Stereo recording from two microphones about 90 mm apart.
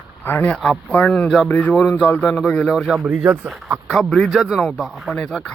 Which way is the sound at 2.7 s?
5° right (ahead or behind).